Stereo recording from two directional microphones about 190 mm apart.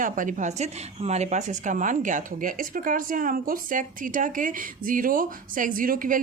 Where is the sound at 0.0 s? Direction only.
45° right (ahead or behind).